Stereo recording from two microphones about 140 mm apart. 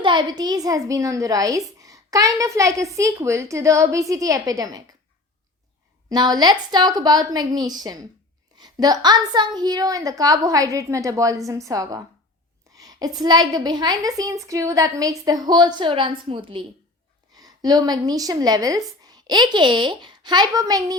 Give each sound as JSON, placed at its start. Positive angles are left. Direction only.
{"t": 0.0, "sound": "a woman's voice", "side_deg": -35}
{"t": 6.1, "sound": "a woman's voice", "side_deg": -30}